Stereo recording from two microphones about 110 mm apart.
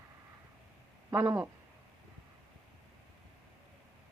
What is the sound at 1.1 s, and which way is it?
Speech, 25° right (ahead or behind).